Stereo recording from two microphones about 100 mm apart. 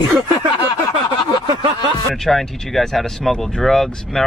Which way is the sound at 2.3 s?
Centre (ahead or behind).